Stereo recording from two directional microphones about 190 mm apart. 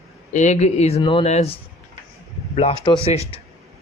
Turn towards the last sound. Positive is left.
turn(degrees=35)  # may be behind; listen again after turning